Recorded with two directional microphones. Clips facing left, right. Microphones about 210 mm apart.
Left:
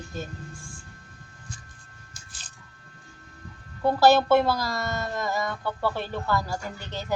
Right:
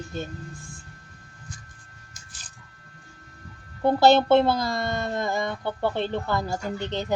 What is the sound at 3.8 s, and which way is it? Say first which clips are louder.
Speech: right 1 dB; 25° right (ahead or behind).